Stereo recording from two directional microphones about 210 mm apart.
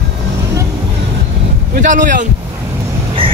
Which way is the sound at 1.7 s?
40° right (ahead or behind).